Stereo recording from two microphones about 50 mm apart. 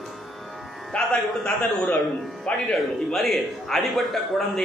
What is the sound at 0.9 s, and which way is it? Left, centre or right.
Speech, centre.